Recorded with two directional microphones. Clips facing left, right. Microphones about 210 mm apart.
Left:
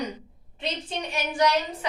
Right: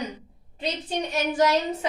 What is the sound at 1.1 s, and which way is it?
Speech, 40° right (ahead or behind).